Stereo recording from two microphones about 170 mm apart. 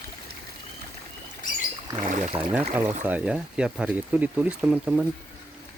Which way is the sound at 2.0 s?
50° right (ahead or behind).